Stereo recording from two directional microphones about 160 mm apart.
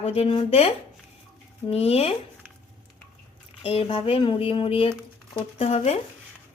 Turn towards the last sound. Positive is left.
turn(degrees=40)  # may be behind; listen again after turning